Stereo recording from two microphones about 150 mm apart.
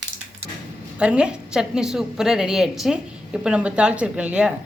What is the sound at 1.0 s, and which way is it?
A woman's voice, 5° right (ahead or behind).